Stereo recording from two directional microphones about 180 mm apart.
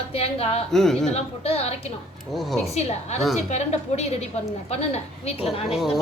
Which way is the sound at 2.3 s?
Centre (ahead or behind).